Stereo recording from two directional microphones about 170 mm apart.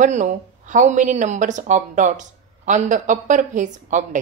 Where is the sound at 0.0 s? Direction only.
45° right (ahead or behind).